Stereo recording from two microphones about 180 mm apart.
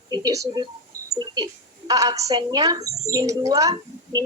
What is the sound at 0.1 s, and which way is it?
A woman's voice, 20° right (ahead or behind).